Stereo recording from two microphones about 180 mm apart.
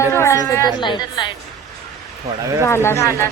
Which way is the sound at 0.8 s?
25° left (ahead or behind).